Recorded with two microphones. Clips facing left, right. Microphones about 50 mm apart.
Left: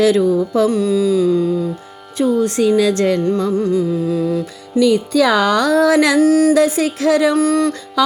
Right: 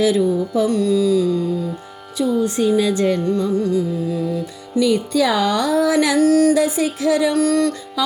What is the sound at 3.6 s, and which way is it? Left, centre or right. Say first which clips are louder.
Music: left 2 dB; left.